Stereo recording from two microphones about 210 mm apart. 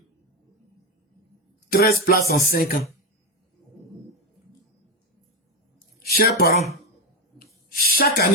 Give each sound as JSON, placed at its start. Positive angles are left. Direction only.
{"t": 1.7, "sound": "music", "side_deg": 45}
{"t": 6.1, "sound": "speech", "side_deg": 45}
{"t": 7.3, "sound": "a sound", "side_deg": 45}